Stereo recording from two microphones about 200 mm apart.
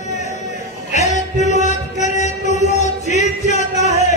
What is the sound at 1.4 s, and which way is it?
Mantra, 35° left (ahead or behind).